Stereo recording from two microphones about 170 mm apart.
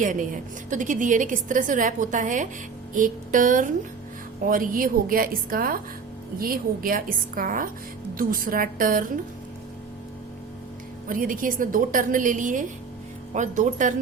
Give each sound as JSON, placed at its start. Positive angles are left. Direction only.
{"t": 0.0, "sound": "a woman's voice", "side_deg": -50}
{"t": 11.1, "sound": "a woman's voice", "side_deg": -55}